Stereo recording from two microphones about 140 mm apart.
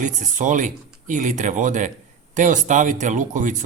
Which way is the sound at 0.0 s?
65° right (ahead or behind).